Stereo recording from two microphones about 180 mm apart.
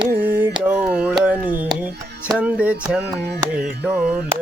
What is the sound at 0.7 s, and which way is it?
Mantra, 5° right (ahead or behind).